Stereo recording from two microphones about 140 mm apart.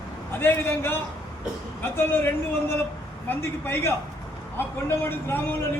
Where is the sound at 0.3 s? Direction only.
15° left (ahead or behind).